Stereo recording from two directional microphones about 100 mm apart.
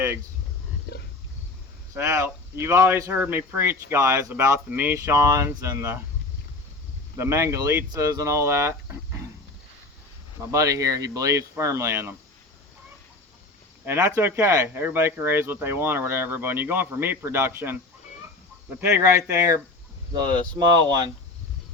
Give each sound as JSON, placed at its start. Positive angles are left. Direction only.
{"t": 1.9, "sound": "speech", "side_deg": -30}
{"t": 3.1, "sound": "speech", "side_deg": -20}
{"t": 7.2, "sound": "speech", "side_deg": -30}
{"t": 10.5, "sound": "speech", "side_deg": -35}
{"t": 14.2, "sound": "speech", "side_deg": -25}
{"t": 18.8, "sound": "speech", "side_deg": -25}
{"t": 20.1, "sound": "speech", "side_deg": -45}